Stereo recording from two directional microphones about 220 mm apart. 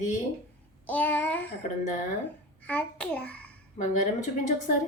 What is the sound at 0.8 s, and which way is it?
Child singing, 10° left (ahead or behind).